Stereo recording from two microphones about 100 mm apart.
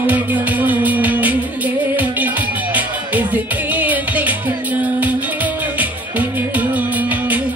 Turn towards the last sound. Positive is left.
turn(degrees=-15)  # may be behind; listen again after turning